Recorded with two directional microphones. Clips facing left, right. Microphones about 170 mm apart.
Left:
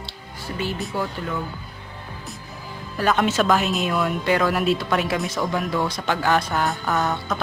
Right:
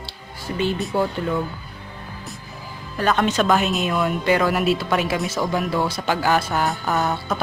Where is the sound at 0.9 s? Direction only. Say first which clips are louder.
Right 5 dB; 25° right (ahead or behind).